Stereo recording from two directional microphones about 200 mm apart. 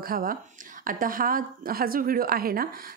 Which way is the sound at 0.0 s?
45° right (ahead or behind).